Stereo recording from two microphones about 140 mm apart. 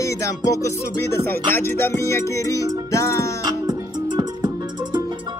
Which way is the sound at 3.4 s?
30° right (ahead or behind).